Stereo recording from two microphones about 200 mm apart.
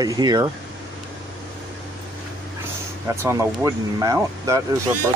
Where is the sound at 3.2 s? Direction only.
15° right (ahead or behind).